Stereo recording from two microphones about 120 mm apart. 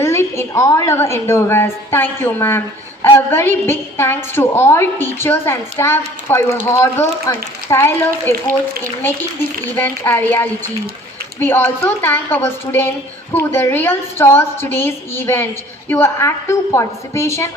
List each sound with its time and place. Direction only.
0.0 s a woman's voice: 20° left (ahead or behind)
9.7 s a woman's voice: 20° left (ahead or behind)